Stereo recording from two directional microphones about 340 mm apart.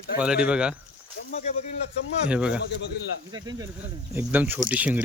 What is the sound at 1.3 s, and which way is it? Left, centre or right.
Speech, centre.